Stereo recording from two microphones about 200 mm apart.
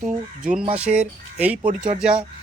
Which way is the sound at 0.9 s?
5° right (ahead or behind).